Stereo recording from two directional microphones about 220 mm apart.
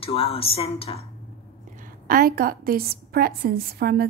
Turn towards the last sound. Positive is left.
turn(degrees=-45)  # may be behind; listen again after turning